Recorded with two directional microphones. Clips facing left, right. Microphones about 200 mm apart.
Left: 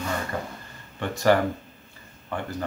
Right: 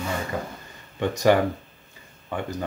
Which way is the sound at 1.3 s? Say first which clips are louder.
Even; 15° right (ahead or behind).